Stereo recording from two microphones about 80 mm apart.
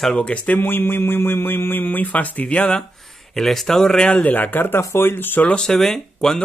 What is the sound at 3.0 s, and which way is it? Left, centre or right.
Speech, centre.